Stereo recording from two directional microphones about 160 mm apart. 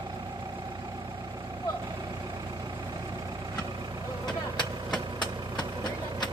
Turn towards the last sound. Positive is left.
turn(degrees=25)  # may be behind; listen again after turning